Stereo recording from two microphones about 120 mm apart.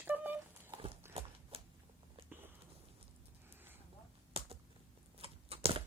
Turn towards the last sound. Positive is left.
turn(degrees=-55)  # may be behind; listen again after turning